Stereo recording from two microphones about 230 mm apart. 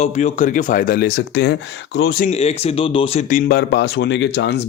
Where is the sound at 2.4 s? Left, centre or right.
Left.